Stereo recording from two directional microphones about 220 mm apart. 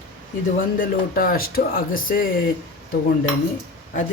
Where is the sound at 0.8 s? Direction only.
40° left (ahead or behind).